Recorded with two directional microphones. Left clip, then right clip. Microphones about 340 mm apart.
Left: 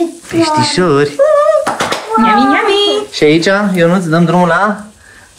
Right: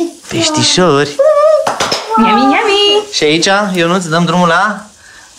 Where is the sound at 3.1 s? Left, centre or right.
Centre.